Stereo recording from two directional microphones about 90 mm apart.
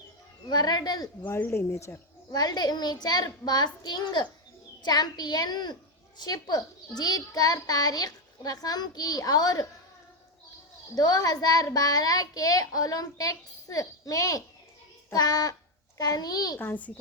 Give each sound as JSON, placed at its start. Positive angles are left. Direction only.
{"t": 0.4, "sound": "a child's voice", "side_deg": 50}
{"t": 1.4, "sound": "a child's voice", "side_deg": 20}
{"t": 1.7, "sound": "speech", "side_deg": 35}
{"t": 2.3, "sound": "a child's voice", "side_deg": 50}
{"t": 10.9, "sound": "a child's voice", "side_deg": 45}
{"t": 16.6, "sound": "a child's voice", "side_deg": 20}